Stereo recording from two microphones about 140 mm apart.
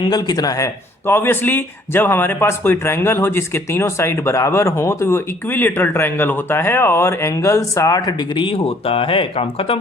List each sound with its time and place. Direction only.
0.0 s speech: 30° left (ahead or behind)